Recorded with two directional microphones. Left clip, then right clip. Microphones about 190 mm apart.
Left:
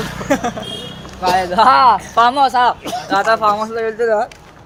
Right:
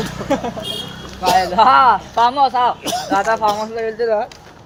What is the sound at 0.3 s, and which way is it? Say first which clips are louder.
Speech: left 2 dB; 55° left (ahead or behind).